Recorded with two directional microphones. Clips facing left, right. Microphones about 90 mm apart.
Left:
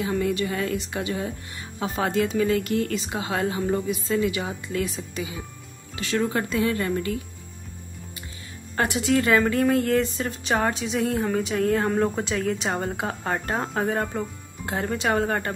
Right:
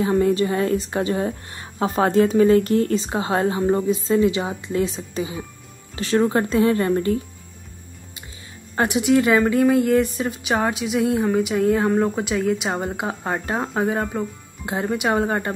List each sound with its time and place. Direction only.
0.0 s a woman's voice: 35° right (ahead or behind)
8.7 s speech: 20° right (ahead or behind)
14.7 s speech: 15° right (ahead or behind)